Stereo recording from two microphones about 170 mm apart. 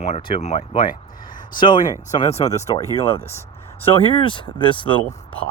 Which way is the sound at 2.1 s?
40° left (ahead or behind).